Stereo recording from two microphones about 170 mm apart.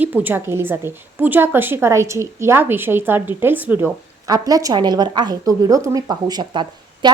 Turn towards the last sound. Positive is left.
turn(degrees=-25)  # may be behind; listen again after turning